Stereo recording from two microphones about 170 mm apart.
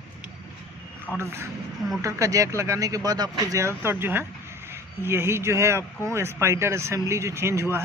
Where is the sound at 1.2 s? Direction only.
15° right (ahead or behind).